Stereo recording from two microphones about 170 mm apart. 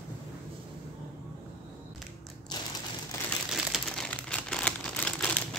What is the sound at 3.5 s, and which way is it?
Crumpling, 5° right (ahead or behind).